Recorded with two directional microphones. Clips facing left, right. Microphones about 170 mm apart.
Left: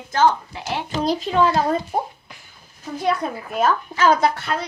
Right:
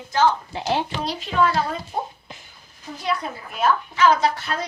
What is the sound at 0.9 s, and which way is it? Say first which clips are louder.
Speech: left 6 dB; 40° left (ahead or behind).